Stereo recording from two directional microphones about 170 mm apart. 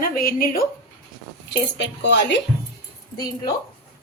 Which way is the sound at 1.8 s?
90° left.